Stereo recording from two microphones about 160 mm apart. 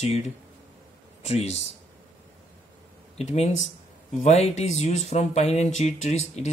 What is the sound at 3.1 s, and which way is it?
Speech, 45° left (ahead or behind).